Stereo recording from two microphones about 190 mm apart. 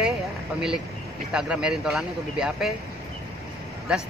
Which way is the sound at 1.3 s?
5° right (ahead or behind).